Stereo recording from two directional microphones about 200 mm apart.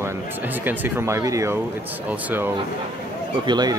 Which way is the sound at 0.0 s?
10° right (ahead or behind).